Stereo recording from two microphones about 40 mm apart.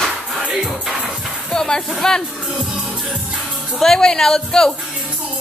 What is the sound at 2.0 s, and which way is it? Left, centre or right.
Speech, centre.